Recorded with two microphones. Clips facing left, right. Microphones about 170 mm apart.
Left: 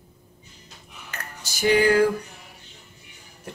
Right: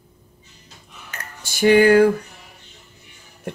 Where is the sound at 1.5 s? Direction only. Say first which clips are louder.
Right 6 dB; 60° right (ahead or behind).